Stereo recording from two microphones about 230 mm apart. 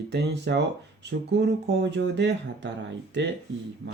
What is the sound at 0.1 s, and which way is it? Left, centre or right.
Speech, right.